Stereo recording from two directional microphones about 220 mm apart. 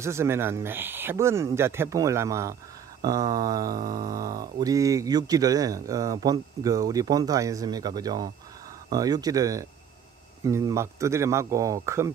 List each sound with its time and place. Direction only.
0.0 s mantra: 10° right (ahead or behind)